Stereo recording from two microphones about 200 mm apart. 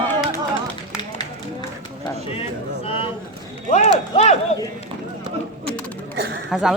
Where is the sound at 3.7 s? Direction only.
30° left (ahead or behind).